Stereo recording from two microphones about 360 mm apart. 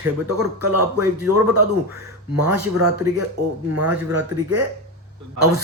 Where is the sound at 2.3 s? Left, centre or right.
Right.